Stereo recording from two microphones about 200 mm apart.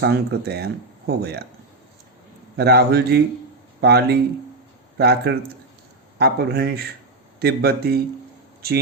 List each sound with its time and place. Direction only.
0.0 s speech: 55° right (ahead or behind)
2.6 s speech: 55° right (ahead or behind)